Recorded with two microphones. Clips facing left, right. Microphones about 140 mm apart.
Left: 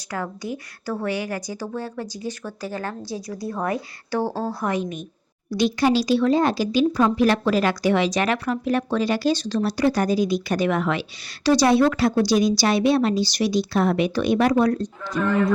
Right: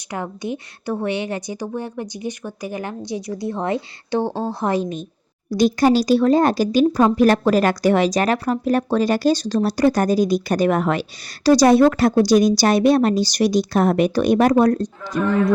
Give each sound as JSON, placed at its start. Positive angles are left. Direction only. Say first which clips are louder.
{"t": 0.1, "sound": "a woman's voice", "louder": "right 2 dB", "side_deg": -20}
{"t": 5.5, "sound": "speech", "louder": "right 4 dB", "side_deg": -40}